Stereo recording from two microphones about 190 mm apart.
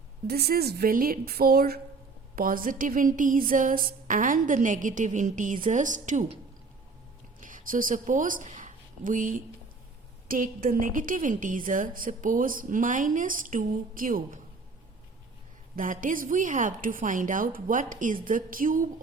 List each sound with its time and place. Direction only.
0.3 s a woman's voice: 55° right (ahead or behind); by 6.4 s 35° right (ahead or behind)
7.4 s a woman's voice: 45° right (ahead or behind)
15.7 s a woman's voice: 45° right (ahead or behind)